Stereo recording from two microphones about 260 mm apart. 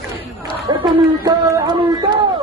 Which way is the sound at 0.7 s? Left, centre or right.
Centre.